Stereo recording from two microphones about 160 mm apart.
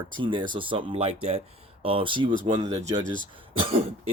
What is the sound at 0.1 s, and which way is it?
Speech, 30° right (ahead or behind).